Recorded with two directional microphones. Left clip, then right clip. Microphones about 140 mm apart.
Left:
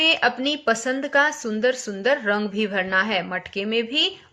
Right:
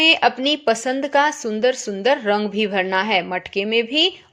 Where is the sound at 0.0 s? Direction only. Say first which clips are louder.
Right 4 dB; 40° right (ahead or behind).